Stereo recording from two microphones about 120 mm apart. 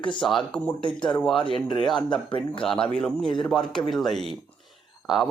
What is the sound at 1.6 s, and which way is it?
Speech, 40° left (ahead or behind).